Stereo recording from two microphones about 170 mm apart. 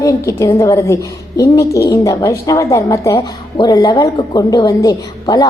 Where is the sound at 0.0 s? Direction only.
15° left (ahead or behind).